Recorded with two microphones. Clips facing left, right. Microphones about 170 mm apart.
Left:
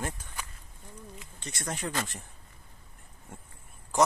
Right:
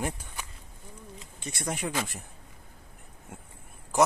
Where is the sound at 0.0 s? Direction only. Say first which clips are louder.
Right 3 dB; 15° right (ahead or behind).